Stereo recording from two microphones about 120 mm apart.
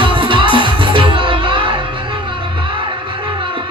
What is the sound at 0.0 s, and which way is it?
Music, 45° right (ahead or behind).